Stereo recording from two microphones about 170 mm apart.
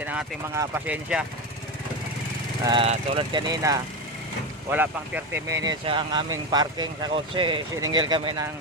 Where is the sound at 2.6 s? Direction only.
25° right (ahead or behind).